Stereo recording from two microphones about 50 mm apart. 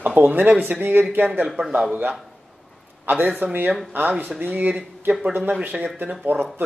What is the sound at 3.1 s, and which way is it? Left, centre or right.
Speech, right.